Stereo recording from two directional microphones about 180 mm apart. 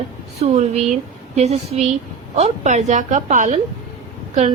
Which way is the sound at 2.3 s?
40° right (ahead or behind).